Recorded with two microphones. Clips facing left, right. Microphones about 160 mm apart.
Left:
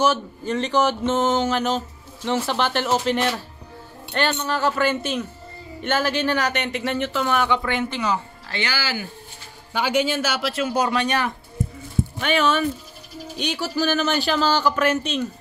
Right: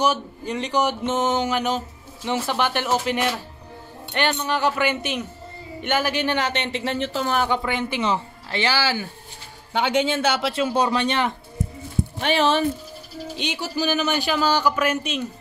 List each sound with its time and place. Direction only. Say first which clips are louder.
0.0 s speech: left 1 dB; 15° right (ahead or behind); by 7.6 s 40° right (ahead or behind)
8.0 s speech: right 1 dB; 25° right (ahead or behind)
13.4 s speech: left 2 dB; 20° right (ahead or behind)